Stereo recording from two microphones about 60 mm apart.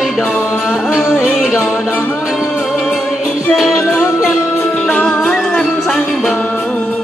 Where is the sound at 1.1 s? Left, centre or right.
Centre.